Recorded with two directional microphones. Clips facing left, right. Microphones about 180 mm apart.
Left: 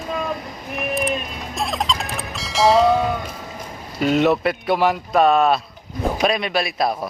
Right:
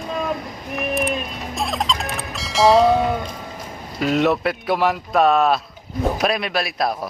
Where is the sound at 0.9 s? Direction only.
Centre (ahead or behind).